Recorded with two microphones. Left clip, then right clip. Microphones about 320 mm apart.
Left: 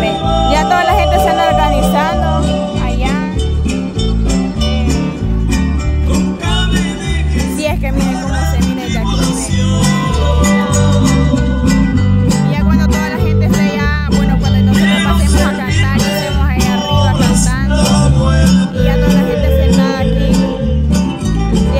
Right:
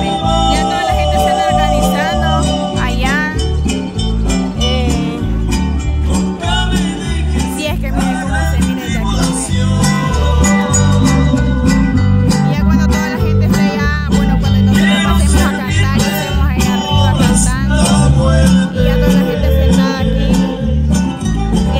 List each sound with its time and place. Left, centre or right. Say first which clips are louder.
0.5 s music: left 3 dB; centre
9.8 s music: even; centre